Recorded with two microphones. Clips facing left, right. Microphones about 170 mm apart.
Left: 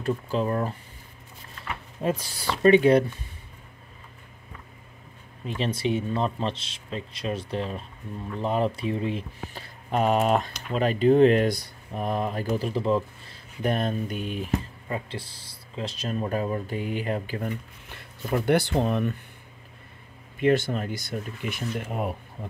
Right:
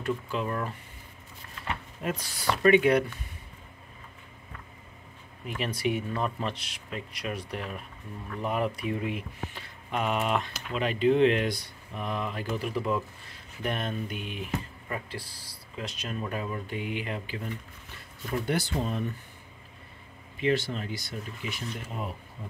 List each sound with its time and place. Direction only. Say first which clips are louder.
0.0 s speech: left 4 dB; 35° left (ahead or behind)
2.0 s speech: left 5 dB; 25° left (ahead or behind)
5.4 s speech: left 3 dB; 25° left (ahead or behind)
14.9 s speech: left 5 dB; 25° left (ahead or behind); by 17.5 s 45° left (ahead or behind)
17.9 s speech: left 5 dB; 60° left (ahead or behind)
20.3 s speech: left 5 dB; 50° left (ahead or behind)
22.4 s a sound: left 4 dB; 55° left (ahead or behind)